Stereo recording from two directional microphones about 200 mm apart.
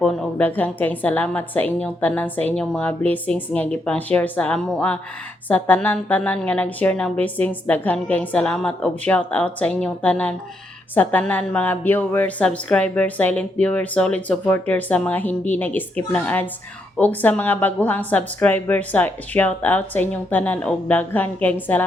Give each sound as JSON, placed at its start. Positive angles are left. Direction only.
{"t": 0.0, "sound": "a woman's voice", "side_deg": 5}